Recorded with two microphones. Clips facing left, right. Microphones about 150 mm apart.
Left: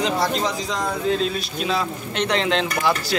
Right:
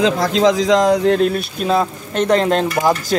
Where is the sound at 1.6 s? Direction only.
45° right (ahead or behind).